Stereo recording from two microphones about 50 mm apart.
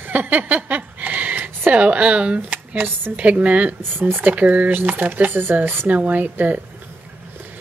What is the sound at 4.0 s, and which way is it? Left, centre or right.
Speech, right.